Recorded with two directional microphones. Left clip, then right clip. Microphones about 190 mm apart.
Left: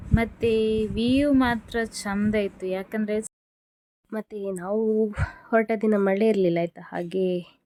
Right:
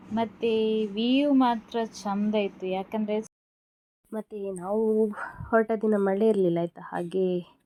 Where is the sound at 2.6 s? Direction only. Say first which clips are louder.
Left 1 dB; 55° left (ahead or behind).